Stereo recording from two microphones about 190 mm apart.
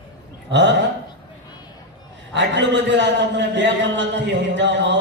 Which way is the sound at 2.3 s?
70° right (ahead or behind).